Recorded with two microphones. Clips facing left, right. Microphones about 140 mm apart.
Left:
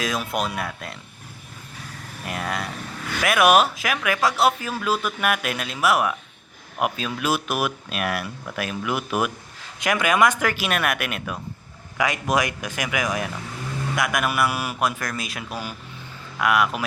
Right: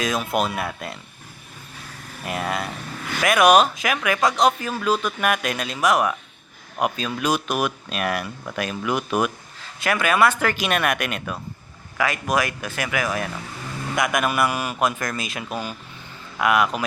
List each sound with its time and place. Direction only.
0.0 s speech: centre (ahead or behind)
2.2 s speech: 5° right (ahead or behind)
11.9 s speech: 20° left (ahead or behind)
13.9 s speech: centre (ahead or behind)